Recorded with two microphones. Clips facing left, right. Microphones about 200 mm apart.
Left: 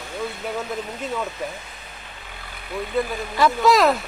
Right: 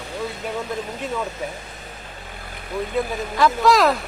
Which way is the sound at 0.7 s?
5° left (ahead or behind).